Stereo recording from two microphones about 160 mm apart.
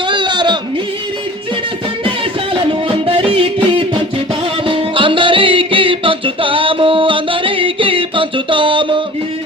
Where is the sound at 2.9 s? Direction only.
35° right (ahead or behind).